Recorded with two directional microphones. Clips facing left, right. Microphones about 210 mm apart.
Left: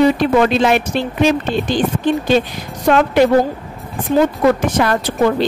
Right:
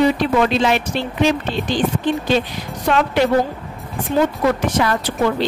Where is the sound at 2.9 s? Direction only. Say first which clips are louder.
Left 5 dB; 50° left (ahead or behind).